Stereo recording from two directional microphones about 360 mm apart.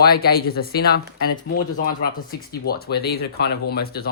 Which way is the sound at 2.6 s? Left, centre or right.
Left.